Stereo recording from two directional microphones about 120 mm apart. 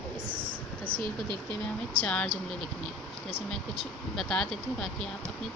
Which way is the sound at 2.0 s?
10° left (ahead or behind).